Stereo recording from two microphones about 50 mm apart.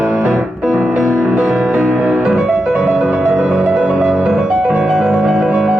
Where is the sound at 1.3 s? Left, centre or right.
Right; by 5.8 s centre.